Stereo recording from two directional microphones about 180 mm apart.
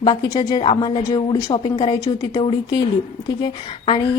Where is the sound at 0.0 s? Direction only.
25° left (ahead or behind).